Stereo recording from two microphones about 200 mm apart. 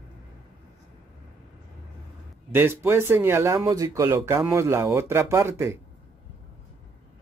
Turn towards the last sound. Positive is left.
turn(degrees=-15)  # may be behind; listen again after turning